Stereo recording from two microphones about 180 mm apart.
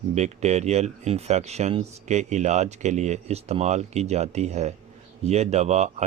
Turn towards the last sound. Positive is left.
turn(degrees=-40)  # may be behind; listen again after turning